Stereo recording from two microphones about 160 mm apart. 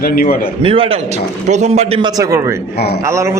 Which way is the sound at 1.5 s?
45° right (ahead or behind).